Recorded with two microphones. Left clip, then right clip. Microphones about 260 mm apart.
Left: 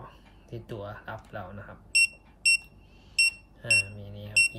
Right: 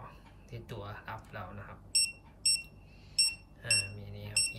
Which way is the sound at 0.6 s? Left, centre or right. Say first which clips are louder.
Left 5 dB; centre.